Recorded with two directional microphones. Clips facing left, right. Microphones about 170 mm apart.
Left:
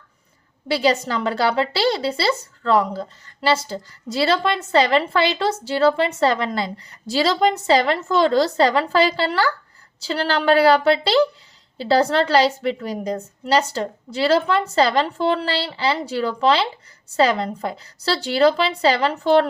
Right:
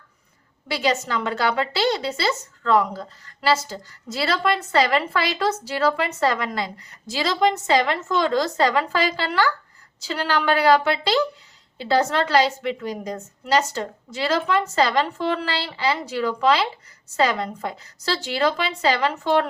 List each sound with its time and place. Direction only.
0.7 s a woman's voice: 30° left (ahead or behind)